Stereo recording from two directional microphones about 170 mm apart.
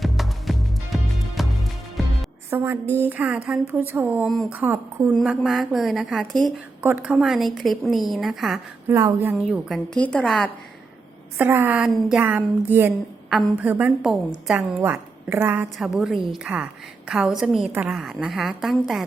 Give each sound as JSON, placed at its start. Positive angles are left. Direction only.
{"t": 0.0, "sound": "music", "side_deg": 0}
{"t": 2.5, "sound": "a woman's voice", "side_deg": -15}
{"t": 4.3, "sound": "a woman's voice", "side_deg": 0}
{"t": 4.5, "sound": "a woman's voice", "side_deg": -10}
{"t": 8.9, "sound": "a woman's voice", "side_deg": -15}
{"t": 9.5, "sound": "a woman's voice", "side_deg": 0}
{"t": 11.3, "sound": "a woman's voice", "side_deg": -10}